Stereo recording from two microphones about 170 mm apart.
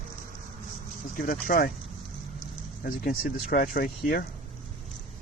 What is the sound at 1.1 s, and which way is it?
Speech, 55° left (ahead or behind).